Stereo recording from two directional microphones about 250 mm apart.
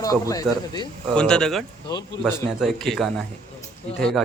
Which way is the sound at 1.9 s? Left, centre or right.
Centre.